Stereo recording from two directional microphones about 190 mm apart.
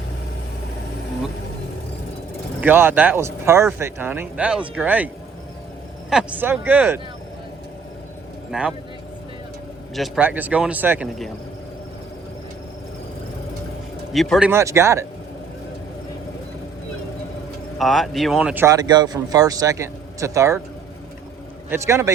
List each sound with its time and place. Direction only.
2.6 s speech: 10° right (ahead or behind)
8.4 s speech: 5° right (ahead or behind)
9.9 s speech: 5° right (ahead or behind)
14.1 s speech: centre (ahead or behind); by 15.0 s 15° right (ahead or behind)
17.7 s speech: centre (ahead or behind); by 20.6 s 15° right (ahead or behind)
21.7 s speech: 15° right (ahead or behind)